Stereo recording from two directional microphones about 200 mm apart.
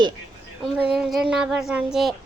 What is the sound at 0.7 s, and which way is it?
Speech, 5° right (ahead or behind).